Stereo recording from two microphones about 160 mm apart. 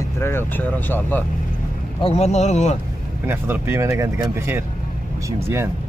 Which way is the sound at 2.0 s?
45° left (ahead or behind).